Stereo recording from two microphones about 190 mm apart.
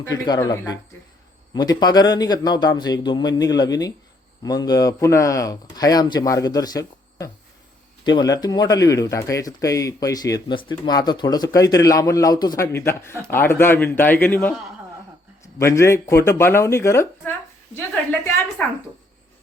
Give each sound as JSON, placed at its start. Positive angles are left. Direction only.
{"t": 0.0, "sound": "speech", "side_deg": 20}
{"t": 15.5, "sound": "speech", "side_deg": 15}
{"t": 18.6, "sound": "speech", "side_deg": 10}